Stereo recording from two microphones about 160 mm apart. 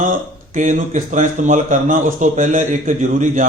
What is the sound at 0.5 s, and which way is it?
A man's voice, 55° right (ahead or behind).